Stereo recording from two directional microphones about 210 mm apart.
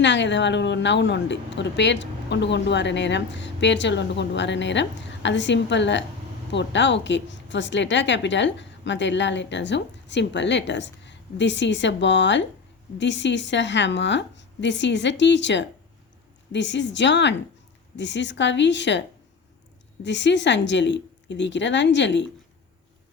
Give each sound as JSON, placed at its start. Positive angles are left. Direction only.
{"t": 0.0, "sound": "a woman's voice", "side_deg": 60}